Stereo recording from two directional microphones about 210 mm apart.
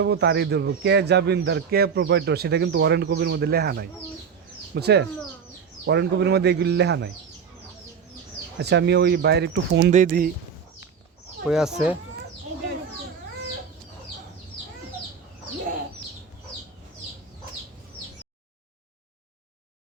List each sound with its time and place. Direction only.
0.0 s speech: 50° right (ahead or behind)
8.5 s speech: 55° right (ahead or behind)
9.9 s speech: 40° right (ahead or behind)
11.4 s speech: 5° right (ahead or behind)